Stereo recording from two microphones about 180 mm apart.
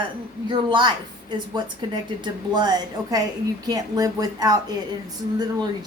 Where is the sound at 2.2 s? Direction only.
25° right (ahead or behind).